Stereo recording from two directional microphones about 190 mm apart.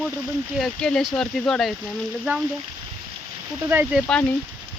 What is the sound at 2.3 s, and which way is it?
Speech, 10° right (ahead or behind).